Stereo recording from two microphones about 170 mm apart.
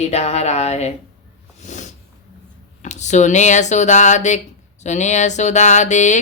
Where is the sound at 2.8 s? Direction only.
45° left (ahead or behind).